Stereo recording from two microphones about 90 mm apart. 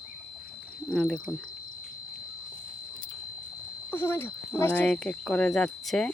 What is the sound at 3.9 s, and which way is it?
Speech, 25° left (ahead or behind).